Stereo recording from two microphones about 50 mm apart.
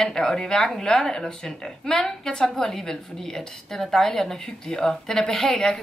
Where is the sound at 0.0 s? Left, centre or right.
Centre.